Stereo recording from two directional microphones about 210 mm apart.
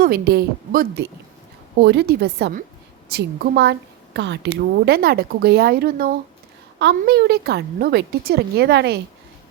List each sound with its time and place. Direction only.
0.0 s a woman's voice: 45° right (ahead or behind)